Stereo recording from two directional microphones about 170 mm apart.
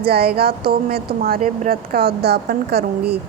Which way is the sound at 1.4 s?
50° right (ahead or behind).